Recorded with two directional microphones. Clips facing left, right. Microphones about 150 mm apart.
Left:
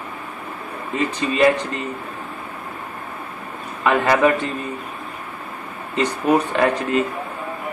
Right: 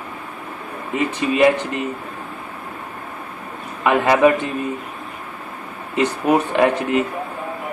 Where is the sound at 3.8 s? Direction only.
15° right (ahead or behind).